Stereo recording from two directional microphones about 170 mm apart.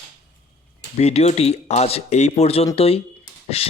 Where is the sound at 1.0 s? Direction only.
40° left (ahead or behind).